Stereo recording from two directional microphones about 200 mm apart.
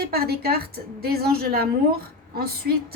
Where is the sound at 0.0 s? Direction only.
50° right (ahead or behind).